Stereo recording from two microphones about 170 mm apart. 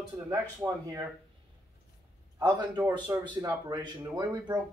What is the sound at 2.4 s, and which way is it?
A man's voice, 20° right (ahead or behind).